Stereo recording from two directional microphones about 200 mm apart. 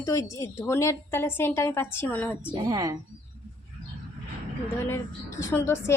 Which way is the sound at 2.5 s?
20° right (ahead or behind).